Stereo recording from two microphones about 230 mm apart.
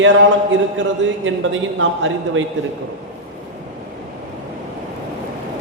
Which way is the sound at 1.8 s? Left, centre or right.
Right.